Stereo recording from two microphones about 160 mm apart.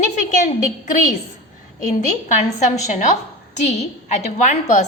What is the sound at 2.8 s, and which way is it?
A woman's voice, 50° left (ahead or behind).